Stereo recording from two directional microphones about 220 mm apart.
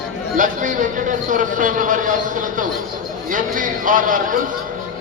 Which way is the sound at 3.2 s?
35° right (ahead or behind).